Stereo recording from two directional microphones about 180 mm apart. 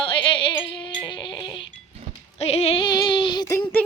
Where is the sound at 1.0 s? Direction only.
25° left (ahead or behind).